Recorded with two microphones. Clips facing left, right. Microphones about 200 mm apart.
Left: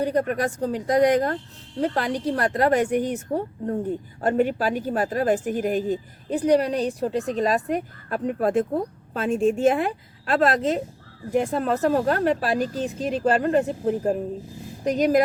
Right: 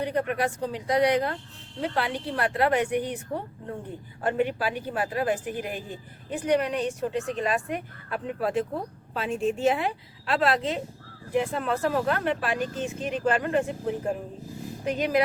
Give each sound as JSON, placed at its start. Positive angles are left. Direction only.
{"t": 0.0, "sound": "a woman's voice", "side_deg": 40}